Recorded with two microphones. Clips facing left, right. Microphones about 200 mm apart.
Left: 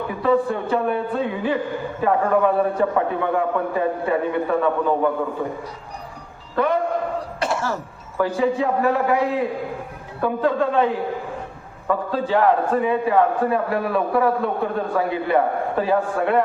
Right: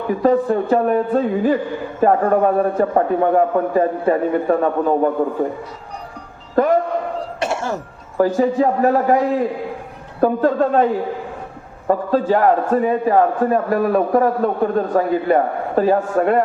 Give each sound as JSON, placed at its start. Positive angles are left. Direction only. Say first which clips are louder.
{"t": 0.1, "sound": "a man's voice", "louder": "right 5 dB", "side_deg": -45}
{"t": 6.6, "sound": "a man's voice", "louder": "right 5 dB", "side_deg": -40}
{"t": 7.4, "sound": "throat clearing", "louder": "right 2 dB", "side_deg": -25}
{"t": 8.2, "sound": "a man's voice", "louder": "right 5 dB", "side_deg": -45}